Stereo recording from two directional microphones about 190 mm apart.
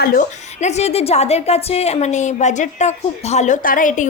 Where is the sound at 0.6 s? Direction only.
35° left (ahead or behind).